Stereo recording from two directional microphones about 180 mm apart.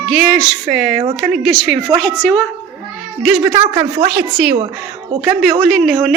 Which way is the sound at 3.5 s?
20° right (ahead or behind).